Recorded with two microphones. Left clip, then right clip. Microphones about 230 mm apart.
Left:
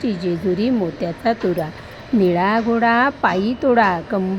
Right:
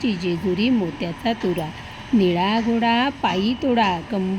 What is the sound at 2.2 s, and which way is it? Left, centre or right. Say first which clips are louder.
Speech: left 3 dB; left.